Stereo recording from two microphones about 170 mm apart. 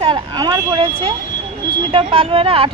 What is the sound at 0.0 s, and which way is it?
Vehicle, 25° right (ahead or behind).